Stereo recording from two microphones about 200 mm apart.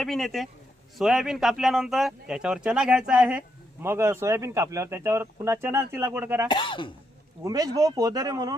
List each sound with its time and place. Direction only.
0.0 s speech: centre (ahead or behind)
6.5 s speech: 25° left (ahead or behind)
7.4 s speech: 15° right (ahead or behind)